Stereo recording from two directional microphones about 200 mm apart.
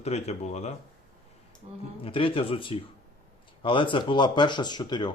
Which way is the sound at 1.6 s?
30° right (ahead or behind).